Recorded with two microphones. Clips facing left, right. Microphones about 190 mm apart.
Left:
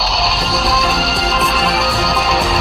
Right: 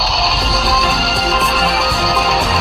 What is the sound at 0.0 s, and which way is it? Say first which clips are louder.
Music: even; centre (ahead or behind).